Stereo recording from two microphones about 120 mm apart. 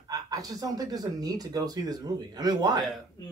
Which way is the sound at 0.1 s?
30° right (ahead or behind).